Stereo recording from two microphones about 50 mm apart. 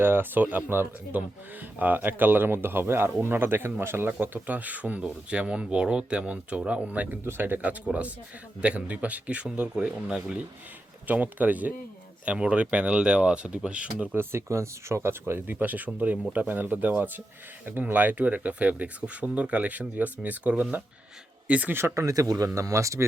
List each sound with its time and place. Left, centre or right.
0.0 s speech: right
1.1 s speech: right
4.4 s speech: right
7.3 s speech: right
11.0 s speech: right
14.2 s speech: right
15.5 s speech: right
21.7 s speech: right
21.9 s speech: right